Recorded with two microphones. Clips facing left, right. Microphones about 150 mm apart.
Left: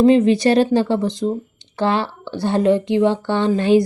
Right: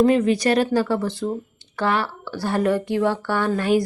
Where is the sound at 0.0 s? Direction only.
25° left (ahead or behind).